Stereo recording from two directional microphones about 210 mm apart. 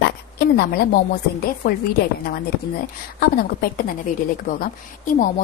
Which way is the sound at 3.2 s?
45° left (ahead or behind).